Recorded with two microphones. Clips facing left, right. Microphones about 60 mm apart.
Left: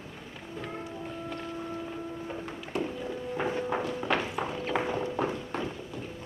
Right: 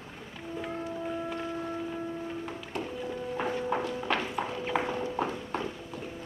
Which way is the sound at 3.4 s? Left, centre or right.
Centre.